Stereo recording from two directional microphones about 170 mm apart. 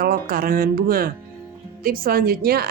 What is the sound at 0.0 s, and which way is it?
A woman's voice, 60° right (ahead or behind).